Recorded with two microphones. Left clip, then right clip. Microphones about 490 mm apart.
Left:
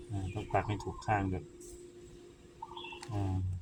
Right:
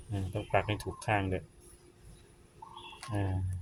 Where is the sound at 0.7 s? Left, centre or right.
Right.